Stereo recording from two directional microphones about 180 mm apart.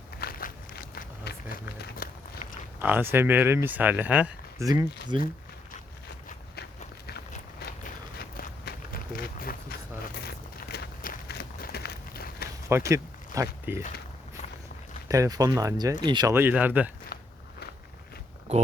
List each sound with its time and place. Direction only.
0.2 s run: 55° left (ahead or behind)
2.7 s speech: 10° right (ahead or behind)
4.6 s speech: 20° right (ahead or behind)
8.4 s walk: 55° left (ahead or behind)
10.2 s a sound: 60° left (ahead or behind)
12.6 s speech: 15° right (ahead or behind)
15.0 s speech: 20° right (ahead or behind)
16.3 s speech: 10° right (ahead or behind)
17.1 s biting: 60° left (ahead or behind)
18.5 s speech: 40° right (ahead or behind)